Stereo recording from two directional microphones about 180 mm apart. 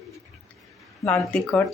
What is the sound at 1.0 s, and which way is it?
Speech, 5° left (ahead or behind).